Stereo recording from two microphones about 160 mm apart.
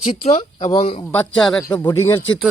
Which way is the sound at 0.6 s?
30° left (ahead or behind).